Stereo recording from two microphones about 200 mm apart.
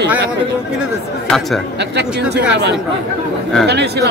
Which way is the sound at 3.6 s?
55° right (ahead or behind).